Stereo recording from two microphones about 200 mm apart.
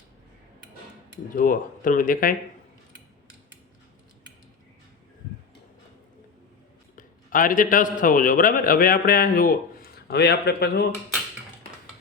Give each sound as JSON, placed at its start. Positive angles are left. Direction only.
{"t": 1.4, "sound": "speech", "side_deg": 45}
{"t": 6.9, "sound": "a man's voice", "side_deg": 45}